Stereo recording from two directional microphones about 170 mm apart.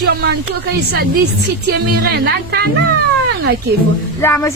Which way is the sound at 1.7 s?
70° right (ahead or behind).